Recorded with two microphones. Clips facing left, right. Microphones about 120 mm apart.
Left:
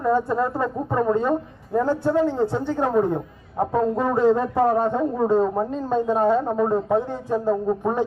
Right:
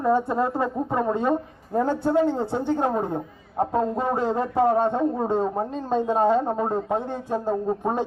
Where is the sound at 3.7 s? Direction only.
25° right (ahead or behind).